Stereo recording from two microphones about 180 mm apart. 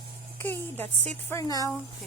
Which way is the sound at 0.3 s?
10° left (ahead or behind).